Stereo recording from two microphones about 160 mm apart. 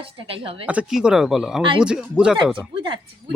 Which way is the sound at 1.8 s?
5° right (ahead or behind).